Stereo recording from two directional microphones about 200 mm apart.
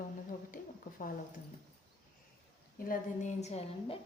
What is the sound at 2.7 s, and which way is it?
A woman's voice, 45° left (ahead or behind).